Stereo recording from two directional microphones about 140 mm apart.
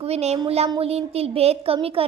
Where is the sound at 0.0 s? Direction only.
50° right (ahead or behind).